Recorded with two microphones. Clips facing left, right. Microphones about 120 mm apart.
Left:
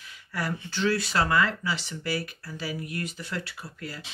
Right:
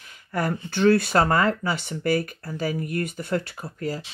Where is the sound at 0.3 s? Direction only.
50° right (ahead or behind).